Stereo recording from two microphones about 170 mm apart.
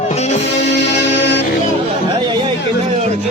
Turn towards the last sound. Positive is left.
turn(degrees=90)